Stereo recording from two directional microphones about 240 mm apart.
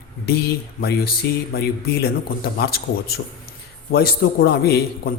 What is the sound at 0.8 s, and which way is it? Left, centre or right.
A man's voice, left.